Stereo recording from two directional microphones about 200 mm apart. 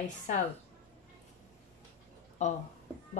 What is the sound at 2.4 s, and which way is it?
Speech, 35° left (ahead or behind).